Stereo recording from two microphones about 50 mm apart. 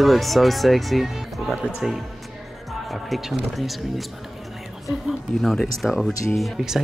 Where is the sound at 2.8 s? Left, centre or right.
Centre.